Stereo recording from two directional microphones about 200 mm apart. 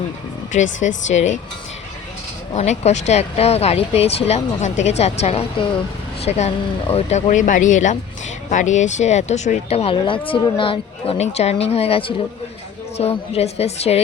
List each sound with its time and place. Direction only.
0.8 s speech: 35° left (ahead or behind)
2.5 s speech: 35° left (ahead or behind)